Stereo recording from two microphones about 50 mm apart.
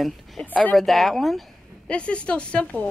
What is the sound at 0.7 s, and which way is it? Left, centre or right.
Speech, centre.